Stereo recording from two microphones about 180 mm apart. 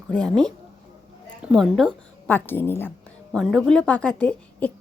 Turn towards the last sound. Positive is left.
turn(degrees=10)  # may be behind; listen again after turning